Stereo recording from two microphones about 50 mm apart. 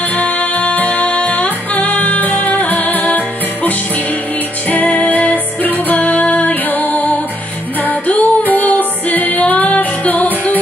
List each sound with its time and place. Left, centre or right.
0.1 s music: left